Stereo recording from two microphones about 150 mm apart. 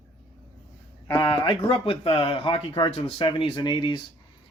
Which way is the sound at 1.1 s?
30° left (ahead or behind).